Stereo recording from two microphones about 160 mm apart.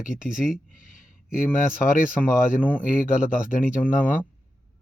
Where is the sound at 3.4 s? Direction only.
55° left (ahead or behind).